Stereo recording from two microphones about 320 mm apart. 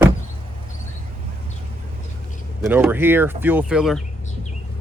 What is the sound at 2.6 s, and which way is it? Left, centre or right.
Speech, centre.